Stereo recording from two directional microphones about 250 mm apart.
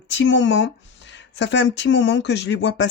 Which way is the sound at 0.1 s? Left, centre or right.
Left.